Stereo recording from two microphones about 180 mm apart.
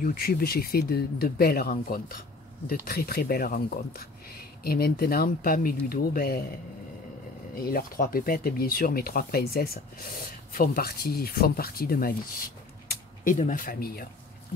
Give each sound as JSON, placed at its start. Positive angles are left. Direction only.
{"t": 0.0, "sound": "speech", "side_deg": 55}
{"t": 7.6, "sound": "speech", "side_deg": 55}